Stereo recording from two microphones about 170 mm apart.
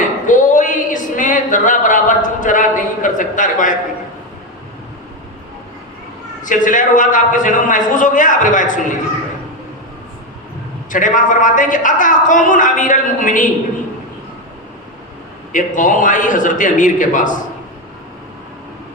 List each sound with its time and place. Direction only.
0.3 s a sound: 50° left (ahead or behind)
6.4 s a man's voice: 50° left (ahead or behind)
10.9 s a man's voice: 50° left (ahead or behind)
15.5 s a man's voice: 50° left (ahead or behind)